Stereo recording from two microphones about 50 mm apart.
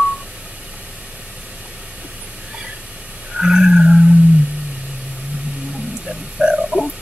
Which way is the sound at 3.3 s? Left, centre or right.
Centre.